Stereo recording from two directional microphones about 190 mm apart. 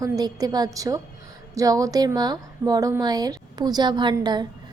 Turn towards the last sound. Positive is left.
turn(degrees=-20)  # may be behind; listen again after turning